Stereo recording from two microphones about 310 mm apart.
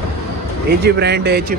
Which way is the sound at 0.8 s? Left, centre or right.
Right.